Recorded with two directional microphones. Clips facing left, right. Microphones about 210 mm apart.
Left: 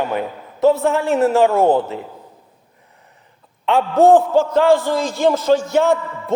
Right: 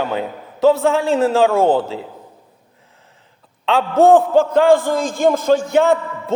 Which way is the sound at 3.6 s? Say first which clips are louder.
Even; 75° right (ahead or behind).